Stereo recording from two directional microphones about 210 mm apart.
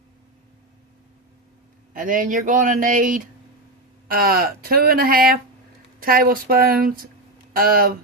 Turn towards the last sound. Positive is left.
turn(degrees=-45)  # may be behind; listen again after turning